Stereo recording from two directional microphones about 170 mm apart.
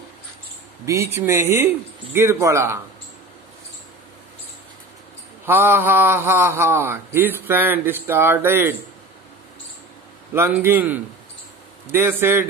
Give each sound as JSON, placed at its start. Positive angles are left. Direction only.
{"t": 0.8, "sound": "a man's voice", "side_deg": -15}
{"t": 5.4, "sound": "a man's voice", "side_deg": -15}
{"t": 10.3, "sound": "a man's voice", "side_deg": -15}